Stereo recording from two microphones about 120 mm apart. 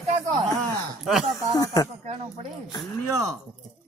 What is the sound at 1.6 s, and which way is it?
Snake, 30° left (ahead or behind).